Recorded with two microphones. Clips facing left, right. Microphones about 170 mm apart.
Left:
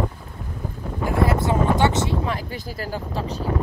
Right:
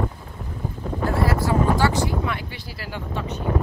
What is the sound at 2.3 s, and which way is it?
Speech, 40° left (ahead or behind).